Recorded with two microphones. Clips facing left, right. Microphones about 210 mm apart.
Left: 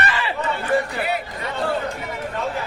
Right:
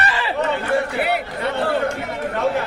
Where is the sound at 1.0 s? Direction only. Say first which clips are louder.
Right 4 dB; 65° right (ahead or behind).